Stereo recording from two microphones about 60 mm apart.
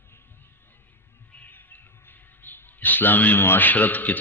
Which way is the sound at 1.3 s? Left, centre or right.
Left.